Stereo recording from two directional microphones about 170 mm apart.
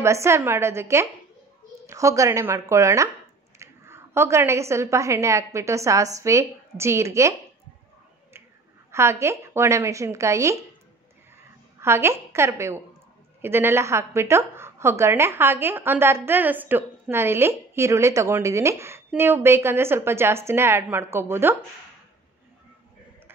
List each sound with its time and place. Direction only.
0.0 s a woman's voice: 15° right (ahead or behind)
8.9 s a woman's voice: 15° right (ahead or behind)
11.8 s a woman's voice: 15° right (ahead or behind)